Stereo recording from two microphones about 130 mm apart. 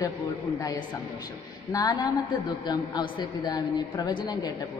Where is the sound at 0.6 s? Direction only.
25° left (ahead or behind).